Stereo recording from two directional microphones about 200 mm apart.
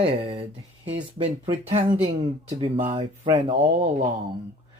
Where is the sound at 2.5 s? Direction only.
25° right (ahead or behind).